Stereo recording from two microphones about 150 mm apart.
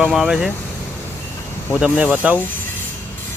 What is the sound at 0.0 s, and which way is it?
Speech, 5° right (ahead or behind).